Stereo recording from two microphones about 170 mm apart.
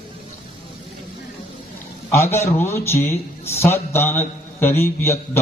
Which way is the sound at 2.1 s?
15° left (ahead or behind).